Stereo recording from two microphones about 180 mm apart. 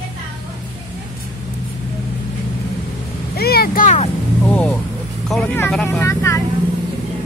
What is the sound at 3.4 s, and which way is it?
Vehicle, 60° left (ahead or behind).